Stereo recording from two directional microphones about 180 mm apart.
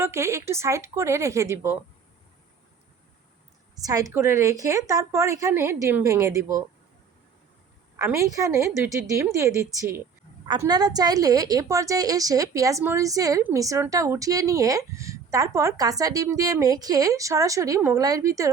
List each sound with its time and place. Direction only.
0.0 s a woman's voice: 15° right (ahead or behind)
3.8 s a woman's voice: 20° right (ahead or behind)
7.9 s a woman's voice: 15° right (ahead or behind)